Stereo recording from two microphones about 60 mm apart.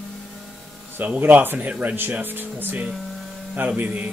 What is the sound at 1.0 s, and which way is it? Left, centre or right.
Speech, right.